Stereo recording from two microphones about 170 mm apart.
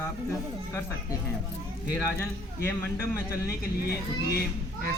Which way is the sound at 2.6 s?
15° left (ahead or behind).